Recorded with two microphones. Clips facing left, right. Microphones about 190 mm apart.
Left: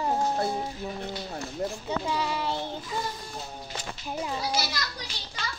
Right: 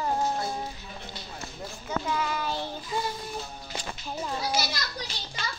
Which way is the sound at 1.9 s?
30° left (ahead or behind).